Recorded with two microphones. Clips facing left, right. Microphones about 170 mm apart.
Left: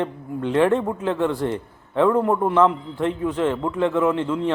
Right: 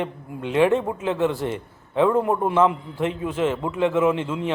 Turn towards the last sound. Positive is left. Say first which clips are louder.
# left 1 dB
turn(degrees=-20)  # may be behind; listen again after turning